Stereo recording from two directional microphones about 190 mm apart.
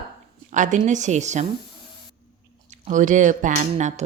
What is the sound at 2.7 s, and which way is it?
Speech, 40° right (ahead or behind).